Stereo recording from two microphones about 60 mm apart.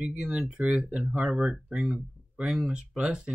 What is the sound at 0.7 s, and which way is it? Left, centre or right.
Speech, centre.